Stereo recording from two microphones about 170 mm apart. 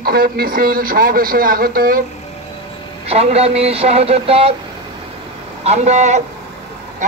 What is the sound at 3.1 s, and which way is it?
Speech, 35° right (ahead or behind).